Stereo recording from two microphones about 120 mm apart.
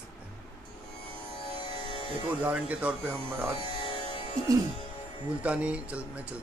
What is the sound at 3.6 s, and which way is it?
Music, 50° left (ahead or behind).